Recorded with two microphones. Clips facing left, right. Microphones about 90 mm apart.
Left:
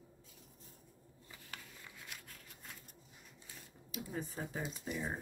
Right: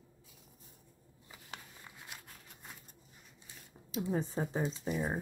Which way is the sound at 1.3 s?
25° right (ahead or behind).